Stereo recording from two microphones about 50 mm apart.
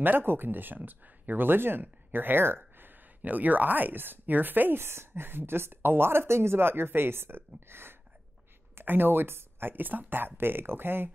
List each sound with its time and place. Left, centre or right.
0.0 s speech: right
3.2 s speech: right